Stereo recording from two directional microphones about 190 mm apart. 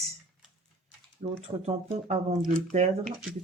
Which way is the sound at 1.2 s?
35° right (ahead or behind).